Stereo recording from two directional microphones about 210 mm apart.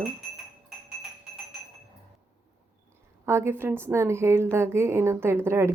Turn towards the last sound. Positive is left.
turn(degrees=-10)  # may be behind; listen again after turning